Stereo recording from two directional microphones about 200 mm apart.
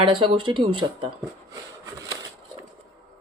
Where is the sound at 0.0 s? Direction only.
25° right (ahead or behind).